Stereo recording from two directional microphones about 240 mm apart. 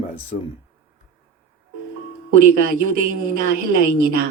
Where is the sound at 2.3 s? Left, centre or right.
Right.